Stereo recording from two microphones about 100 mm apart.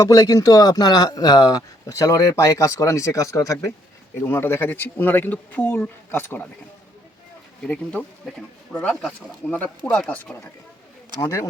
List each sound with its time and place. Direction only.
0.0 s speech: 35° left (ahead or behind); by 6.5 s 20° left (ahead or behind)
8.7 s speech: 15° left (ahead or behind)
11.2 s speech: 35° left (ahead or behind)